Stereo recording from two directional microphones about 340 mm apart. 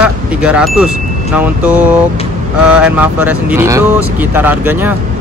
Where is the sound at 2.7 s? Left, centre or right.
Centre.